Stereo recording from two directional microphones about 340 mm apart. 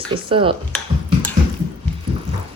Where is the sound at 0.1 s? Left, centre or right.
Centre.